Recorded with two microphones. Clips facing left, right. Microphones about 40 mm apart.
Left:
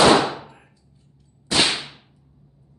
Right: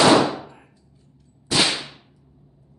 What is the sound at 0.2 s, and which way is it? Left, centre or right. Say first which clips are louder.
Gunshot: right 2 dB; left.